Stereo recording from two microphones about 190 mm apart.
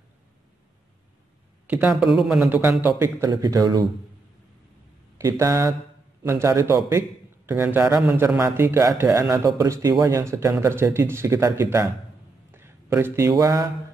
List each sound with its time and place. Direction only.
1.7 s speech: 10° right (ahead or behind)
2.4 s speech: 10° right (ahead or behind)
5.1 s speech: 15° right (ahead or behind)
12.4 s a sound: 10° right (ahead or behind)